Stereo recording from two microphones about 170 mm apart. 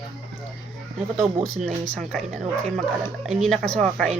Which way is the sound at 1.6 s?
5° left (ahead or behind).